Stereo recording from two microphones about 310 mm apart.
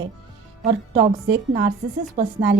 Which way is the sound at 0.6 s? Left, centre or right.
Right.